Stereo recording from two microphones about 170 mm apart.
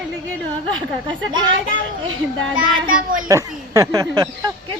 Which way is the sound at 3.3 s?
20° right (ahead or behind).